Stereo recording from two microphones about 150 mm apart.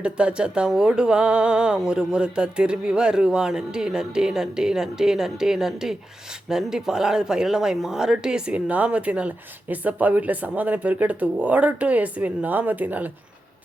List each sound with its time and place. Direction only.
0.0 s speech: 5° right (ahead or behind)